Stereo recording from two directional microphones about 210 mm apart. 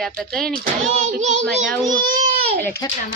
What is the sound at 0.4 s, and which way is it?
A child's voice, 45° right (ahead or behind).